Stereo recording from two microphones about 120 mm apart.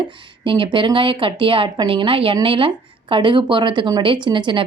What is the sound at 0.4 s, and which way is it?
A woman's voice, 45° right (ahead or behind).